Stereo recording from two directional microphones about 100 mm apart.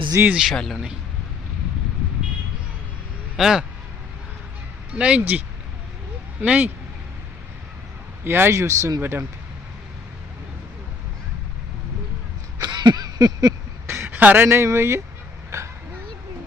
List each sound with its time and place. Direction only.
0.3 s speech: 10° right (ahead or behind)
0.5 s speech: 5° left (ahead or behind)
3.3 s speech: 5° right (ahead or behind)
4.9 s speech: 10° right (ahead or behind)
6.4 s speech: 15° right (ahead or behind)
8.2 s speech: 20° right (ahead or behind)
12.6 s a sound: 45° right (ahead or behind)
13.8 s a sound: 25° right (ahead or behind)
14.4 s speech: 25° right (ahead or behind)
15.4 s a sound: 30° right (ahead or behind)